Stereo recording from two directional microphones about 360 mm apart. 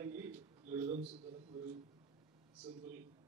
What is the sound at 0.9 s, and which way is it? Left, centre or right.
Speech, centre.